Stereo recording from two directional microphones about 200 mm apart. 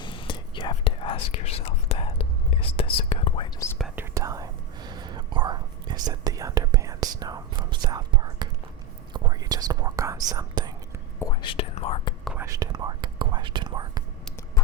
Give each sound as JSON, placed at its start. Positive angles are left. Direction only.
{"t": 0.0, "sound": "whispering", "side_deg": 25}
{"t": 3.8, "sound": "whispering", "side_deg": 0}
{"t": 4.0, "sound": "whispering", "side_deg": -15}
{"t": 11.2, "sound": "whispering", "side_deg": 20}
{"t": 12.2, "sound": "whispering", "side_deg": -5}
{"t": 12.5, "sound": "whispering", "side_deg": -20}